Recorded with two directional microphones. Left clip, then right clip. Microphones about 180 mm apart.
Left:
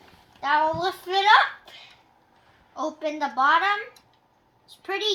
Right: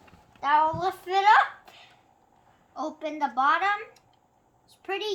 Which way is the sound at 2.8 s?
Centre (ahead or behind).